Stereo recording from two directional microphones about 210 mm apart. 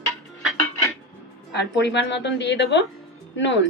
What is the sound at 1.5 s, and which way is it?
Speech, 55° left (ahead or behind).